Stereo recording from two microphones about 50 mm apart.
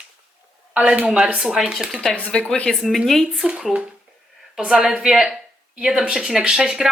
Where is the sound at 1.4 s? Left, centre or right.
Centre.